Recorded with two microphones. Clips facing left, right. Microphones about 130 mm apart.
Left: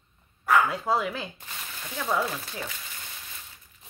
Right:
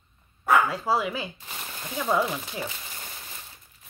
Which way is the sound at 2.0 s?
15° right (ahead or behind).